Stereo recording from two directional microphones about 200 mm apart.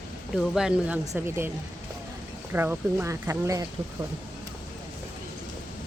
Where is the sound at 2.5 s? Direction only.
10° right (ahead or behind).